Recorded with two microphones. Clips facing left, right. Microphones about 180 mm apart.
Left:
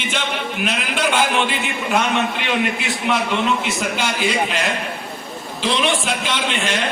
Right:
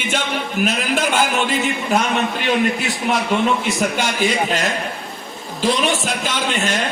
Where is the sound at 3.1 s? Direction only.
40° right (ahead or behind).